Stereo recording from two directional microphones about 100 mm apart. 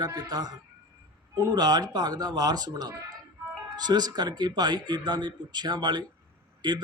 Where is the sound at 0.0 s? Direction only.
40° right (ahead or behind).